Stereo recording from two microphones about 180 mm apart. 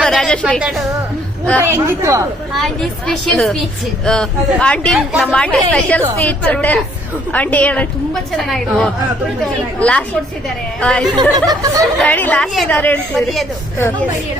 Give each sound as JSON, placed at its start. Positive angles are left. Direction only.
{"t": 0.0, "sound": "a sound", "side_deg": 0}
{"t": 1.6, "sound": "speech", "side_deg": -15}
{"t": 2.6, "sound": "a woman's voice", "side_deg": 0}
{"t": 10.8, "sound": "a woman's voice", "side_deg": 5}
{"t": 11.1, "sound": "speech", "side_deg": -25}
{"t": 12.0, "sound": "a woman's voice", "side_deg": 10}